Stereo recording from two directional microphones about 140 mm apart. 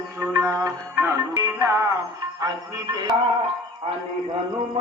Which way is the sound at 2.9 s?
30° right (ahead or behind).